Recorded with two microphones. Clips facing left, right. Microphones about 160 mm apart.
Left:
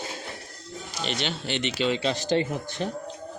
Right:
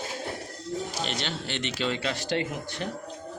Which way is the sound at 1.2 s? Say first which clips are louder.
Left 3 dB; 20° left (ahead or behind).